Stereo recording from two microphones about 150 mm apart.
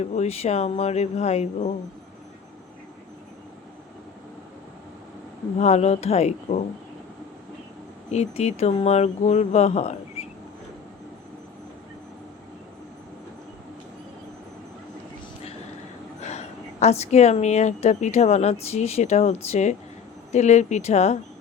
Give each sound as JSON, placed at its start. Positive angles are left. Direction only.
{"t": 0.0, "sound": "speech", "side_deg": 45}
{"t": 5.5, "sound": "speech", "side_deg": 45}
{"t": 8.1, "sound": "speech", "side_deg": 45}
{"t": 16.2, "sound": "speech", "side_deg": 45}